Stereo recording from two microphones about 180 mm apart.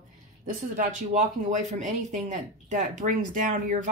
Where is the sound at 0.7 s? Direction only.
40° right (ahead or behind).